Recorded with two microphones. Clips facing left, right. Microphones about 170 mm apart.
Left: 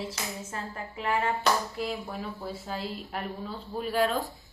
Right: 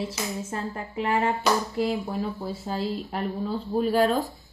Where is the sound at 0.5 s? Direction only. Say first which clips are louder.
Right 6 dB; 35° right (ahead or behind).